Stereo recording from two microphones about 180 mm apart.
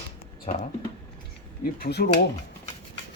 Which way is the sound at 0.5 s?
45° left (ahead or behind).